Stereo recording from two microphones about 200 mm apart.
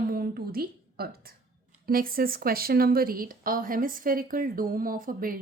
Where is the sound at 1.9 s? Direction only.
45° right (ahead or behind).